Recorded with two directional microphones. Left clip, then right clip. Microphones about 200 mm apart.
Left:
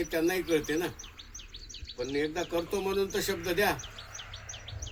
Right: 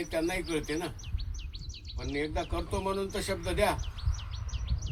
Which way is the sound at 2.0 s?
45° right (ahead or behind).